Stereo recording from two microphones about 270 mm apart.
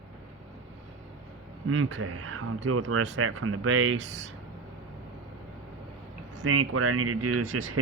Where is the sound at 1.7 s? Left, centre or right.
Right.